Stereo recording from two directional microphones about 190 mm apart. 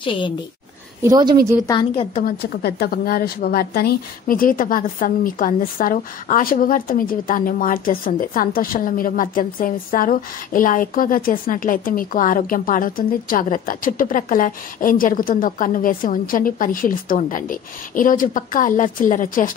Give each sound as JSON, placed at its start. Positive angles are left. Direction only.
{"t": 0.0, "sound": "a woman's voice", "side_deg": 25}
{"t": 1.0, "sound": "a woman's voice", "side_deg": -20}
{"t": 1.7, "sound": "a woman's voice", "side_deg": 25}
{"t": 2.2, "sound": "a woman's voice", "side_deg": 55}